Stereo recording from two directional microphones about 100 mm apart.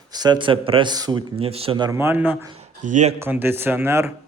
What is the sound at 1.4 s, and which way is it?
Speech, 75° right (ahead or behind).